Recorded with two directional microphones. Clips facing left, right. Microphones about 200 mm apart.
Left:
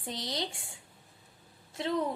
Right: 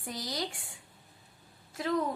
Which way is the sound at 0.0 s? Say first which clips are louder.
Even; 25° left (ahead or behind).